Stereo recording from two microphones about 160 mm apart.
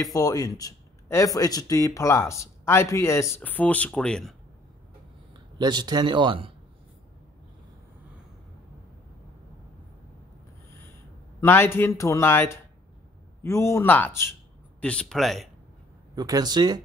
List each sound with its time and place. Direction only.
0.0 s speech: 20° left (ahead or behind); by 4.4 s centre (ahead or behind)
5.6 s a man's voice: 25° right (ahead or behind)
11.4 s speech: 15° left (ahead or behind)
16.2 s a man's voice: 25° right (ahead or behind)